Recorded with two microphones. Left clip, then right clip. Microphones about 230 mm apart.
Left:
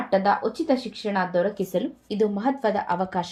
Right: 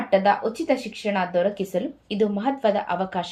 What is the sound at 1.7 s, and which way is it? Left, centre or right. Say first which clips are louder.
Speech: even; left.